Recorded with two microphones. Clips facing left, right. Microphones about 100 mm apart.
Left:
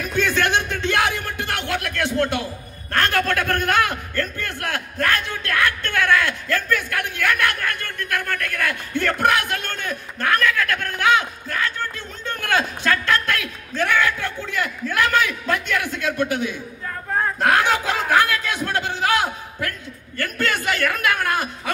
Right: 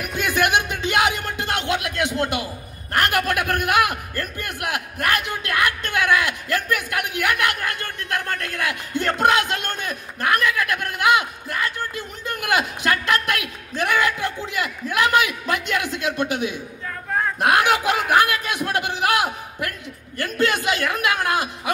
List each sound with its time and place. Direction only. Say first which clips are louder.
0.0 s a man's voice: left 1 dB; 15° right (ahead or behind)
17.4 s a sound: right 1 dB; 15° right (ahead or behind)
20.2 s a man's voice: right 2 dB; 20° right (ahead or behind)